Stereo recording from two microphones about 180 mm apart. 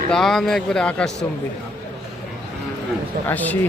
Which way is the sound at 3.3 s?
10° left (ahead or behind).